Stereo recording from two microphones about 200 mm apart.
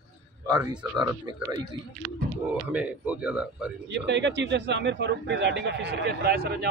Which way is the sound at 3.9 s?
60° right (ahead or behind).